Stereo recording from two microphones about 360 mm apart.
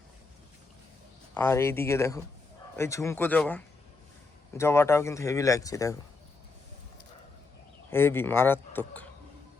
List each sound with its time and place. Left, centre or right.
1.3 s a man's voice: centre
7.9 s speech: centre